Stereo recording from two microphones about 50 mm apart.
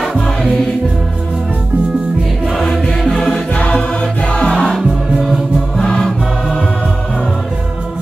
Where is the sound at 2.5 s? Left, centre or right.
Centre.